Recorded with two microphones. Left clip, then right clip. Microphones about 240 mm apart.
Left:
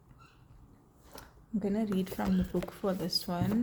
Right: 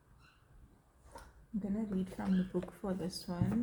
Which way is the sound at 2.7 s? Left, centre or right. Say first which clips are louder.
Left 8 dB; left.